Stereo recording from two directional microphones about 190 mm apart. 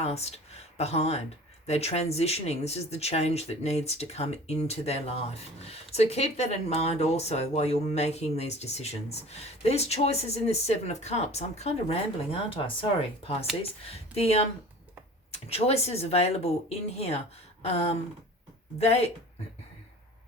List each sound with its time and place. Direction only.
0.0 s speech: 35° left (ahead or behind)